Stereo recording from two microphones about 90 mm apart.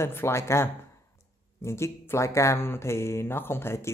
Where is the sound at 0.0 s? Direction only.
30° left (ahead or behind).